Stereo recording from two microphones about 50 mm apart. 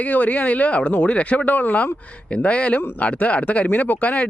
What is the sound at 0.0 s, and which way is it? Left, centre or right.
Speech, left.